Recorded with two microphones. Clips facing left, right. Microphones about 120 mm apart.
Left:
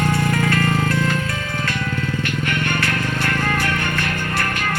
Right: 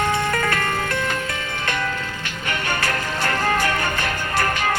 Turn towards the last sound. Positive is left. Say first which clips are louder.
# even
turn(degrees=-40)  # may be behind; listen again after turning